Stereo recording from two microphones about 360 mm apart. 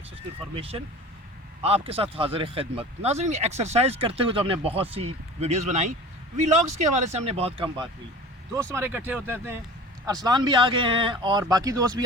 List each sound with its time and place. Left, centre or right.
0.5 s speech: centre